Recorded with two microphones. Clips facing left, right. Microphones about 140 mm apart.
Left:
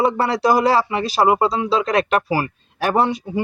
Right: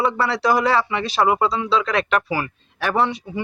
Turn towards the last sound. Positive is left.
turn(degrees=40)  # may be behind; listen again after turning